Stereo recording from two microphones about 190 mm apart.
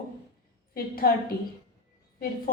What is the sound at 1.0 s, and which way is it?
Speech, 50° left (ahead or behind).